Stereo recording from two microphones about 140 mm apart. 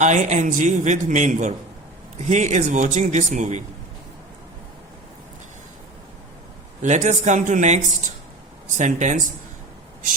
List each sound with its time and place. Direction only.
0.0 s a man's voice: 55° right (ahead or behind)
6.8 s a man's voice: 60° right (ahead or behind)
8.8 s a man's voice: 60° right (ahead or behind)